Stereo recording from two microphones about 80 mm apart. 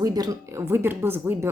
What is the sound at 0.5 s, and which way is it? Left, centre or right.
Speech, right.